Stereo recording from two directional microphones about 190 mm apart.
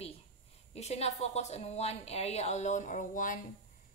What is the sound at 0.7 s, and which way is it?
Speech, 35° left (ahead or behind).